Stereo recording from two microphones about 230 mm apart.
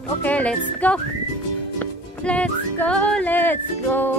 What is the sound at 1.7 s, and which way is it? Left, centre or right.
Music, centre.